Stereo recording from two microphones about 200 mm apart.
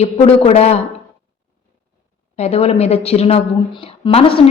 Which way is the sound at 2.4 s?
30° left (ahead or behind).